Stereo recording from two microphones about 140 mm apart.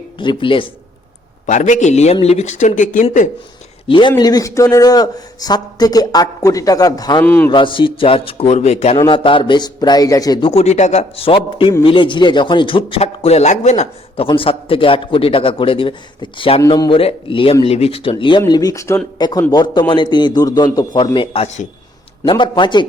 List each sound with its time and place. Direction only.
0.2 s a man's voice: 35° left (ahead or behind)
1.5 s speech: 60° left (ahead or behind)
3.8 s a man's voice: 35° left (ahead or behind)
7.3 s speech: 15° left (ahead or behind)
7.5 s a man's voice: 35° left (ahead or behind)
9.0 s a man's voice: 40° left (ahead or behind)
10.5 s a man's voice: 50° left (ahead or behind)
14.3 s a man's voice: 40° left (ahead or behind)
16.6 s speech: 25° left (ahead or behind)
17.0 s a man's voice: 40° left (ahead or behind)
21.4 s speech: 55° left (ahead or behind)
22.3 s a man's voice: 35° left (ahead or behind)